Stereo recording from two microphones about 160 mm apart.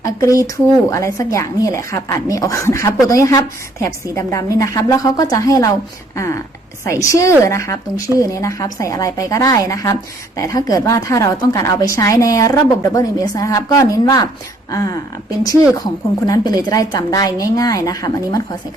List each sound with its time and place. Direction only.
0.0 s a woman's voice: 20° left (ahead or behind)
7.0 s a woman's voice: 20° left (ahead or behind)